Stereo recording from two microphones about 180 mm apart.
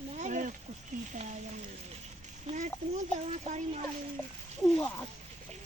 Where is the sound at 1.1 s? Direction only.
40° right (ahead or behind).